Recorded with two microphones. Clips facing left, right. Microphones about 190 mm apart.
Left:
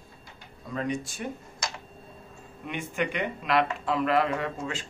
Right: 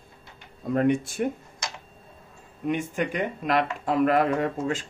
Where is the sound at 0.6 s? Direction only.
55° right (ahead or behind).